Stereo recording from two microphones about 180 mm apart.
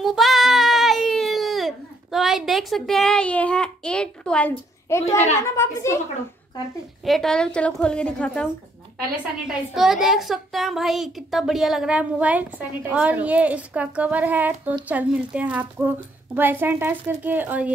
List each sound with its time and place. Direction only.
0.0 s child singing: centre (ahead or behind)
2.1 s a child's voice: centre (ahead or behind)
5.0 s a child's voice: 40° left (ahead or behind)
7.1 s a child's voice: centre (ahead or behind)
9.5 s a child's voice: 5° right (ahead or behind)